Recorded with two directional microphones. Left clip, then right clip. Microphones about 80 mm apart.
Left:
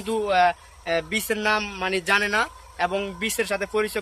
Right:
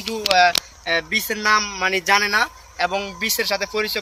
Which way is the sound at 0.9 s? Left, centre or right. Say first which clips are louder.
Right 2 dB; right.